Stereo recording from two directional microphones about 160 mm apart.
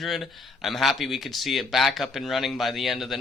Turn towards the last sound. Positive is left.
turn(degrees=0)  # may be behind; listen again after turning